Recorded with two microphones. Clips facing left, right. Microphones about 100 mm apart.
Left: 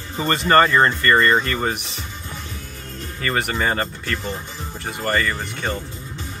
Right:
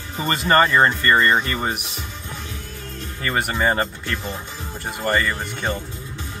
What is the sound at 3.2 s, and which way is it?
Speech, 5° right (ahead or behind).